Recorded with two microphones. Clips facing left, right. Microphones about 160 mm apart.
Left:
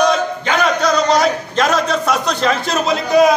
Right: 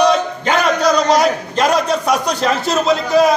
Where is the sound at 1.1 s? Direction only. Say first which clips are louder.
Right 1 dB; 10° right (ahead or behind).